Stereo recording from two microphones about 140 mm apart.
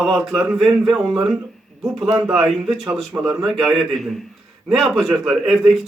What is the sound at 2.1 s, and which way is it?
Speech, 5° right (ahead or behind).